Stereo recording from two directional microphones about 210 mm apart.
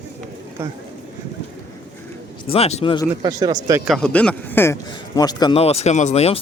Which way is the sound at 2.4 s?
30° left (ahead or behind).